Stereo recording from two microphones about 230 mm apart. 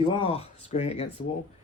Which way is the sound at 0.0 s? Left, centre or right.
Left.